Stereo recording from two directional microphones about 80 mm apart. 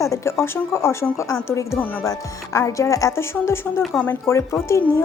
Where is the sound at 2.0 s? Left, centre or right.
Left.